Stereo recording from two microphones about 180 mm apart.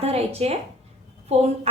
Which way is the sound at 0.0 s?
35° right (ahead or behind).